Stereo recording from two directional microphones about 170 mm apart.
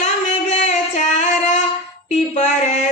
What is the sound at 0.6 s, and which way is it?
Music, 40° left (ahead or behind).